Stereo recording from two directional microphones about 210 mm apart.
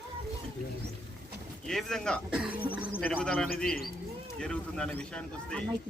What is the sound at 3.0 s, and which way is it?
Speech, 5° left (ahead or behind).